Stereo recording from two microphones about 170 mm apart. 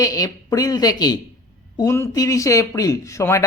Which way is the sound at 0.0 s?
20° left (ahead or behind).